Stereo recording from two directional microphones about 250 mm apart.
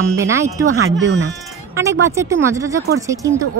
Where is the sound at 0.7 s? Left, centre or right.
Right.